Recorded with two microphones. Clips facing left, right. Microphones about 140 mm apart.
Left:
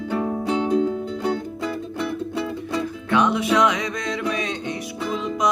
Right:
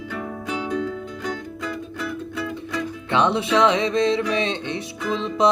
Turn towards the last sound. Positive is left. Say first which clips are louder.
# right 3 dB
turn(degrees=-25)  # may be behind; listen again after turning